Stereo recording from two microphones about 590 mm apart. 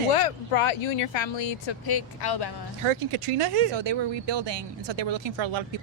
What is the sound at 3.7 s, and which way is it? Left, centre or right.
Speech, right.